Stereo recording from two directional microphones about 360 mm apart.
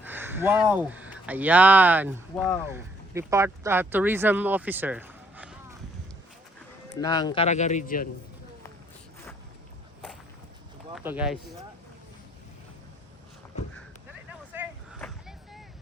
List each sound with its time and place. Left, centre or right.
0.0 s speech: centre
7.0 s speech: centre
10.9 s speech: centre
14.3 s vehicle: centre